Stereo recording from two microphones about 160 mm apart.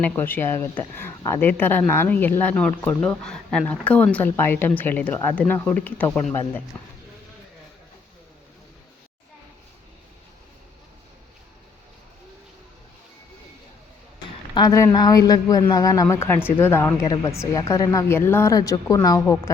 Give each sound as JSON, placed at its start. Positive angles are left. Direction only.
{"t": 0.0, "sound": "speech", "side_deg": 10}
{"t": 14.5, "sound": "speech", "side_deg": 20}